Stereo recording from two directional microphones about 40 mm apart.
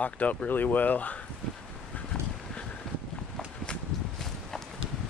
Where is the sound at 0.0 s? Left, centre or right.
Left.